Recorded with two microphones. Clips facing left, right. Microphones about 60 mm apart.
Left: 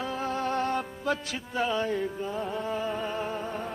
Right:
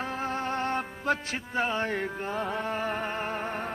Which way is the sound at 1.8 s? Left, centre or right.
Right.